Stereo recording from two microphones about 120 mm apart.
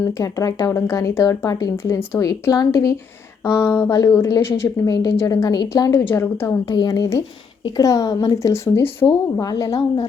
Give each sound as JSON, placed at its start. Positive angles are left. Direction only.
{"t": 0.2, "sound": "a woman's voice", "side_deg": 25}
{"t": 1.7, "sound": "a woman's voice", "side_deg": 20}
{"t": 5.9, "sound": "a woman's voice", "side_deg": 20}
{"t": 9.4, "sound": "a woman's voice", "side_deg": 30}